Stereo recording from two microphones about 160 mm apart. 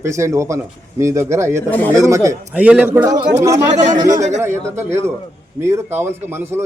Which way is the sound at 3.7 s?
50° right (ahead or behind).